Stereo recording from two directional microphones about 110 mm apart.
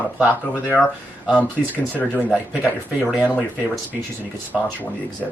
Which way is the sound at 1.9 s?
15° left (ahead or behind).